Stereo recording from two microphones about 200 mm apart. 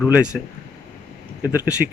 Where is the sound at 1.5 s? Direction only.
10° right (ahead or behind).